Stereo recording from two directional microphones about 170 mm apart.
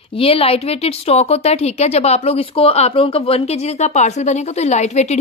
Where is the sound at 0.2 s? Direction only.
35° left (ahead or behind).